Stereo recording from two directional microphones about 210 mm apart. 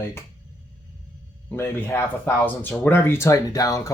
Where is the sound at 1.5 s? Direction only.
10° left (ahead or behind).